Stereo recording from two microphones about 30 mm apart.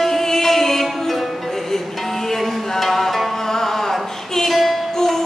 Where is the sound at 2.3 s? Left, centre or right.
Centre.